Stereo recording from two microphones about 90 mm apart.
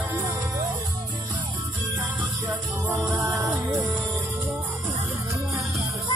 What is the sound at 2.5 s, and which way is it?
Music, 20° right (ahead or behind).